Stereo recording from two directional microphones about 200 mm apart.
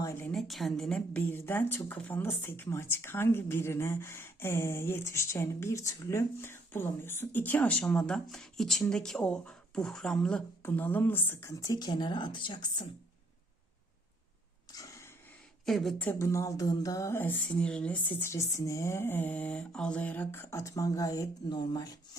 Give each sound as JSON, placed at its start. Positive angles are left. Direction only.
{"t": 0.0, "sound": "a woman's voice", "side_deg": 10}
{"t": 14.7, "sound": "a sound", "side_deg": 15}
{"t": 15.6, "sound": "a woman's voice", "side_deg": 0}